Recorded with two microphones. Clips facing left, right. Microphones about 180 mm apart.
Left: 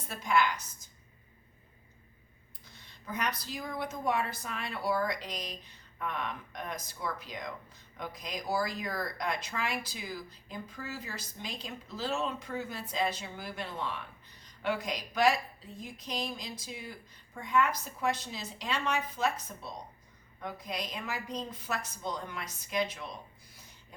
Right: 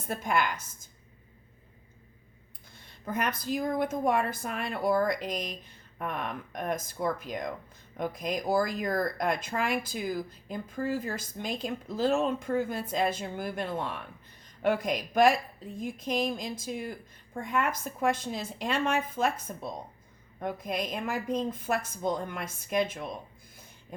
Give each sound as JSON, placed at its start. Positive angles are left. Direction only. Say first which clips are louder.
{"t": 0.1, "sound": "speech", "louder": "even", "side_deg": -50}
{"t": 3.0, "sound": "a woman's voice", "louder": "right 4 dB", "side_deg": -50}